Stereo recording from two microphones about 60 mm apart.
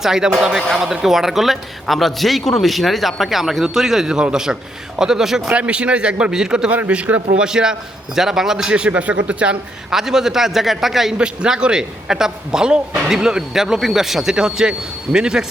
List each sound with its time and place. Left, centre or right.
0.0 s a man's voice: centre
5.5 s a man's voice: centre
6.7 s a man's voice: right
9.9 s a man's voice: centre